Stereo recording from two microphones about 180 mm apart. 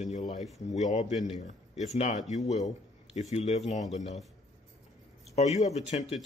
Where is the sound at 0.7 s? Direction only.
40° left (ahead or behind).